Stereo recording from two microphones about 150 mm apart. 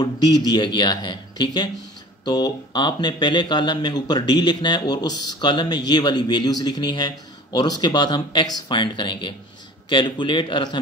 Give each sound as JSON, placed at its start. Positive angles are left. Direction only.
{"t": 0.0, "sound": "a man's voice", "side_deg": 25}